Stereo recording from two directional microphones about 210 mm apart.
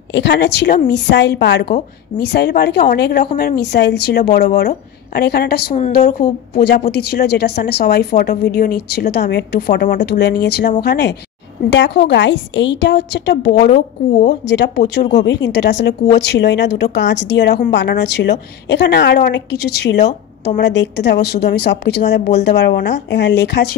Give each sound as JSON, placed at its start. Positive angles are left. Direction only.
{"t": 0.1, "sound": "a woman's voice", "side_deg": 55}
{"t": 10.6, "sound": "speech", "side_deg": 40}
{"t": 10.9, "sound": "a woman's voice", "side_deg": 55}